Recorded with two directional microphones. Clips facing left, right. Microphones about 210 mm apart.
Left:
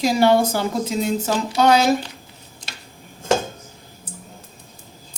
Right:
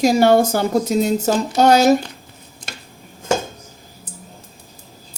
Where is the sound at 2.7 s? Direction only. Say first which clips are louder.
Right 5 dB; 50° right (ahead or behind).